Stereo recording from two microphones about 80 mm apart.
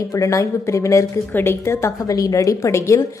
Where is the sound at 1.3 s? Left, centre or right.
Left.